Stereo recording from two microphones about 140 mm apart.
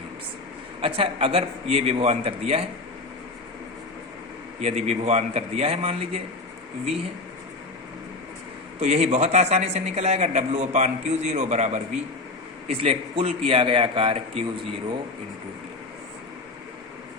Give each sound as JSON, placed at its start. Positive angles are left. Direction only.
{"t": 0.8, "sound": "a man's voice", "side_deg": -40}
{"t": 4.6, "sound": "a man's voice", "side_deg": -50}
{"t": 8.8, "sound": "a man's voice", "side_deg": -50}
{"t": 12.6, "sound": "a man's voice", "side_deg": -45}